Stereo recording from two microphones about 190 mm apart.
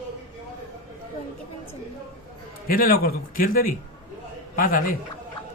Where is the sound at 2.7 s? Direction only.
50° left (ahead or behind).